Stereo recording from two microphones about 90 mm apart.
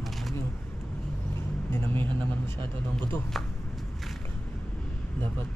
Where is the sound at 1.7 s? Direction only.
25° left (ahead or behind).